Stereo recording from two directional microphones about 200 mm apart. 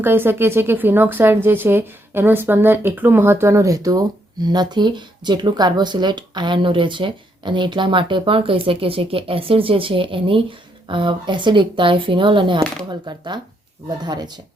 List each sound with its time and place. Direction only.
0.0 s speech: 10° right (ahead or behind)